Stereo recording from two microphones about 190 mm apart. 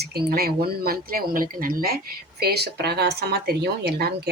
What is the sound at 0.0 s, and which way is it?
Speech, 55° right (ahead or behind).